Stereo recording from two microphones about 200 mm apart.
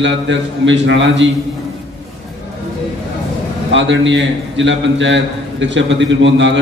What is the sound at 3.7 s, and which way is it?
A man's voice, 65° right (ahead or behind).